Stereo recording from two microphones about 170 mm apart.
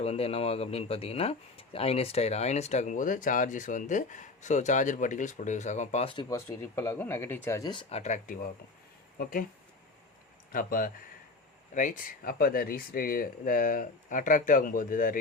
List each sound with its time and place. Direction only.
0.0 s speech: 35° left (ahead or behind)
6.1 s speech: 20° left (ahead or behind); by 8.4 s 50° left (ahead or behind)
10.5 s speech: 55° left (ahead or behind)